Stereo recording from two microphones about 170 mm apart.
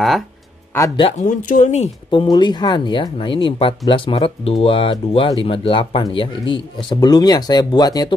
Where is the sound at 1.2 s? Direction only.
50° left (ahead or behind).